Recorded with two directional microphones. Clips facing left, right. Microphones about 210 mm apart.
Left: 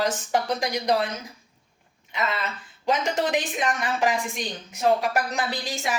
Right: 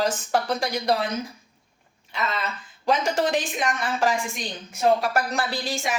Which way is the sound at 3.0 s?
20° left (ahead or behind).